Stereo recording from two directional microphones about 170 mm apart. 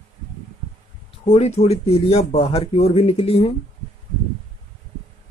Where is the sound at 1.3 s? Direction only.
40° left (ahead or behind).